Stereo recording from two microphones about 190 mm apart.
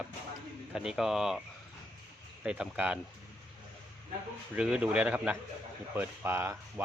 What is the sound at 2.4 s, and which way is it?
Speech, 5° right (ahead or behind).